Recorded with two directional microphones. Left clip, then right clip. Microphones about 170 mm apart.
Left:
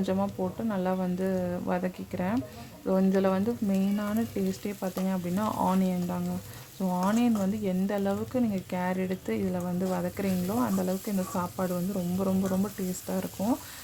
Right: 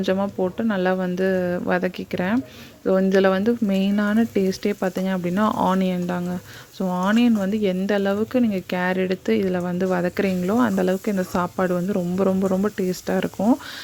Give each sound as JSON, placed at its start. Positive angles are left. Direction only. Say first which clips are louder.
{"t": 0.0, "sound": "speech", "louder": "right 8 dB", "side_deg": -25}